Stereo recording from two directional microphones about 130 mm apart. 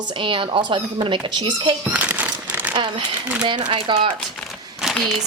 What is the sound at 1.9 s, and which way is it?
Crumpling, 10° right (ahead or behind).